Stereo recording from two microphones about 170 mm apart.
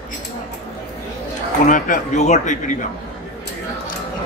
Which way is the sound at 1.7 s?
45° left (ahead or behind).